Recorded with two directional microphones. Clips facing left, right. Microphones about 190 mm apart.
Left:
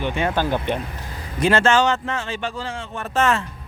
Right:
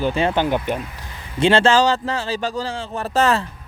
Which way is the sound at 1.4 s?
30° right (ahead or behind).